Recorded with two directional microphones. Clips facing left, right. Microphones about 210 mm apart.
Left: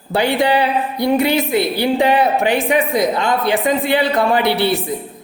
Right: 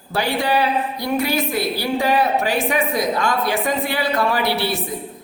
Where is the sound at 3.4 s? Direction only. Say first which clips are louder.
Left 4 dB; 60° left (ahead or behind).